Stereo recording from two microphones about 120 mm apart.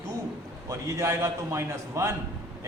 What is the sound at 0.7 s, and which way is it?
A man's voice, 25° right (ahead or behind).